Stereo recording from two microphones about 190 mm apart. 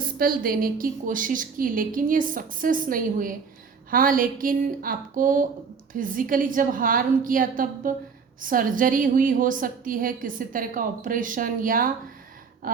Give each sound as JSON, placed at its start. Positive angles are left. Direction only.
{"t": 0.0, "sound": "a woman's voice", "side_deg": -50}